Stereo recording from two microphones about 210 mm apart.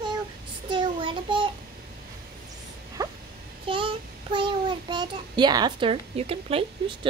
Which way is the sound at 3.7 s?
25° right (ahead or behind).